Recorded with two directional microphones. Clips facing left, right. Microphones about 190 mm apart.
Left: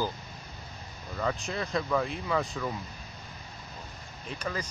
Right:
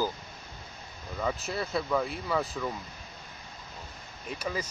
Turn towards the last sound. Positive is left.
turn(degrees=-10)  # may be behind; listen again after turning